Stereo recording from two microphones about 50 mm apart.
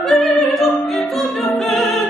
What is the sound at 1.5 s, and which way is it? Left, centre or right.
Music, centre.